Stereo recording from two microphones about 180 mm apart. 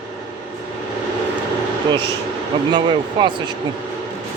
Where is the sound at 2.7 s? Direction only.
25° right (ahead or behind).